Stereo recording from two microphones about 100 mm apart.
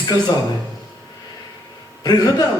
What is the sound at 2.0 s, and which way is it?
Speech, 40° left (ahead or behind).